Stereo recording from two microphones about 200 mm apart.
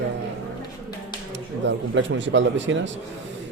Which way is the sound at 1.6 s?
65° right (ahead or behind).